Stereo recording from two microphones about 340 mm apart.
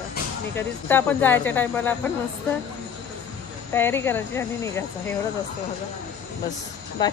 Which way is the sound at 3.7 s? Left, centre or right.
Centre.